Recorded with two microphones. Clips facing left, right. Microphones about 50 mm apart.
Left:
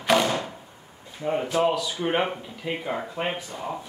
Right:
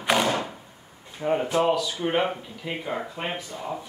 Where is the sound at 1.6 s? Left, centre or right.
Centre.